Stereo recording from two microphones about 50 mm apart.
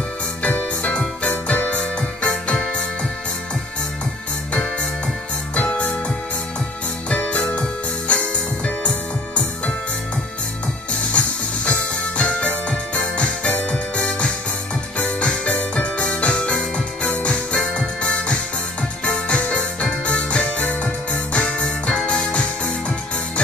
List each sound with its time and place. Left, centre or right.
0.4 s keyboard: left
5.5 s music: left
8.1 s music: left
11.1 s music: left